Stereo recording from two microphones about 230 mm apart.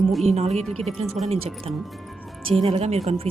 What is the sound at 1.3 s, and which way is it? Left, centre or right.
Speech, right.